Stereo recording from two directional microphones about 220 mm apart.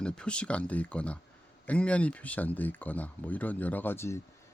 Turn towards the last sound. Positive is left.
turn(degrees=10)  # may be behind; listen again after turning